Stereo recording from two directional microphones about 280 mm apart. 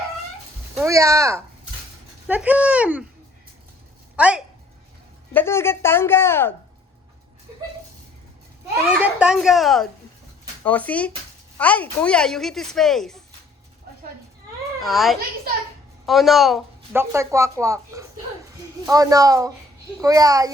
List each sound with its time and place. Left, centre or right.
0.8 s a woman's voice: centre
4.2 s speech: centre
5.3 s speech: centre
8.9 s speech: centre
14.8 s a woman's voice: centre